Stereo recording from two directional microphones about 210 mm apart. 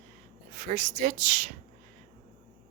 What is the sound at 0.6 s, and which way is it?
Speech, 40° right (ahead or behind).